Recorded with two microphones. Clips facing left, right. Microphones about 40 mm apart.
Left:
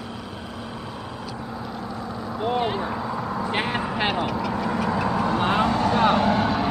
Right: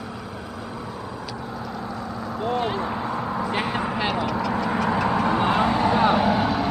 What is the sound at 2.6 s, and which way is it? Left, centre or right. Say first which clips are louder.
Speech: even; centre.